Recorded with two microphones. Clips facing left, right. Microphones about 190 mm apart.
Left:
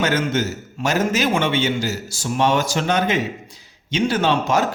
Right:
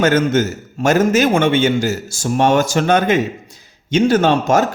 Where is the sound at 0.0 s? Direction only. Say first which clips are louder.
Right 6 dB; 45° right (ahead or behind).